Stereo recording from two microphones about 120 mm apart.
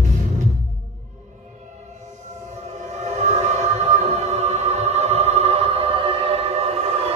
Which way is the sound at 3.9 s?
65° right (ahead or behind).